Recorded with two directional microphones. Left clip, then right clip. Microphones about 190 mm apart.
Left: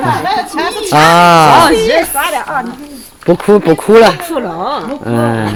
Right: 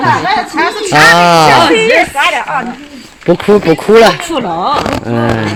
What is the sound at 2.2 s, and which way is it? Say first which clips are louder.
Speech: right 4 dB; 55° left (ahead or behind).